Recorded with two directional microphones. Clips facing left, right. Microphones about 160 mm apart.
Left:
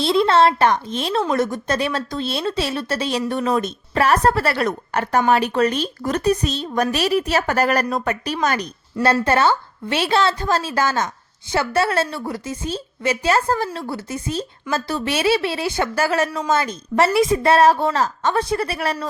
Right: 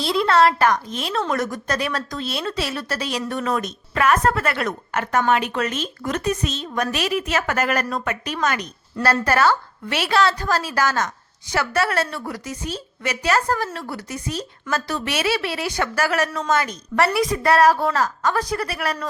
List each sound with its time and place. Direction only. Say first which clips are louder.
0.0 s a woman's voice: left 2 dB; 25° left (ahead or behind)